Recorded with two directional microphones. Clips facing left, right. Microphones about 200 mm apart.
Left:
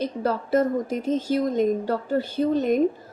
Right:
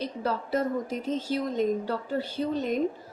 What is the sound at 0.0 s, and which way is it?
A woman's voice, 45° left (ahead or behind).